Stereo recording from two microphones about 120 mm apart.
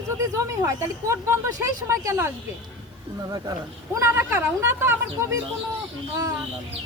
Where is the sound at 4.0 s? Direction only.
20° right (ahead or behind).